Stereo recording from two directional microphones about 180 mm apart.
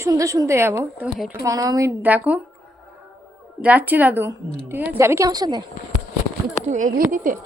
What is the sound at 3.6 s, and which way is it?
A woman's voice, 10° right (ahead or behind).